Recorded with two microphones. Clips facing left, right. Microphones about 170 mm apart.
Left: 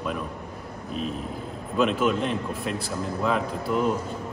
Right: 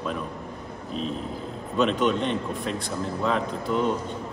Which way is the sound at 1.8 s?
5° left (ahead or behind).